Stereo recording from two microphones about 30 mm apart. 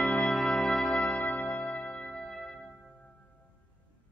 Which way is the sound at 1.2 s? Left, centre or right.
Left.